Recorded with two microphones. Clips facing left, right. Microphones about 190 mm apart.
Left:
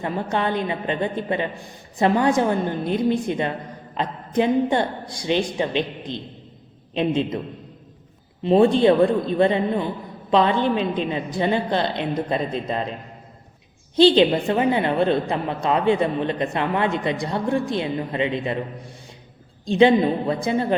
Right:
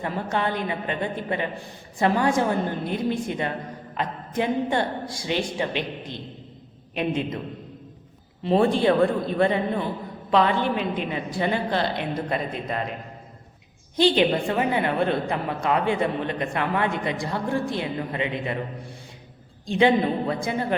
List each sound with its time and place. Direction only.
0.0 s a woman's voice: 20° left (ahead or behind)
8.4 s a woman's voice: 20° left (ahead or behind)
14.2 s a woman's voice: 25° left (ahead or behind)
19.6 s a woman's voice: 20° left (ahead or behind)